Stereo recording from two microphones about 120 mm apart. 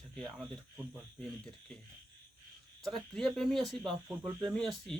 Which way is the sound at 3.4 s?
5° left (ahead or behind).